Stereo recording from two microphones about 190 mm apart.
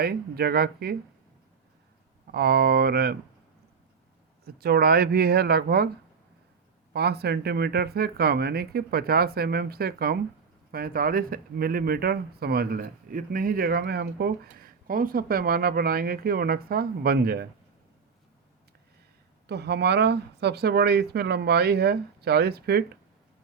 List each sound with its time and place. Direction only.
0.0 s speech: 55° right (ahead or behind)
2.3 s speech: 55° right (ahead or behind)
4.4 s speech: 55° right (ahead or behind)
6.9 s speech: 60° right (ahead or behind)
14.4 s speech: 50° right (ahead or behind)
19.5 s speech: 60° right (ahead or behind)